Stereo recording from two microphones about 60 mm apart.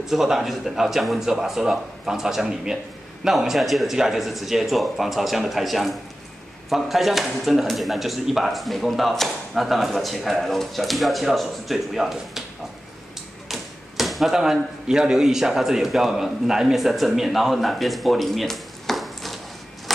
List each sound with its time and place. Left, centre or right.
0.0 s speech: centre
13.5 s speech: centre